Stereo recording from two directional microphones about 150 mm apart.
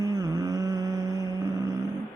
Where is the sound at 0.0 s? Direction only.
25° right (ahead or behind).